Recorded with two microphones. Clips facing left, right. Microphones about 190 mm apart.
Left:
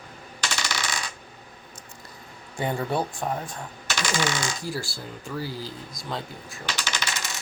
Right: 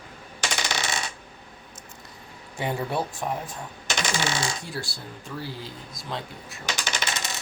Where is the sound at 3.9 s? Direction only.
25° right (ahead or behind).